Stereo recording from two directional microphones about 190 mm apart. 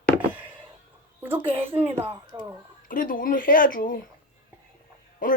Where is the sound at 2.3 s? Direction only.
25° right (ahead or behind).